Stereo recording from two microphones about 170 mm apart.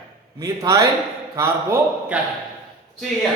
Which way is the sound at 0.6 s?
20° right (ahead or behind).